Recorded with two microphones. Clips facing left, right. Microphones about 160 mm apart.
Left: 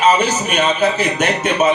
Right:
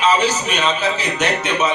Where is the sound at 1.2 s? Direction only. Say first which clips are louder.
Left 3 dB; 50° left (ahead or behind).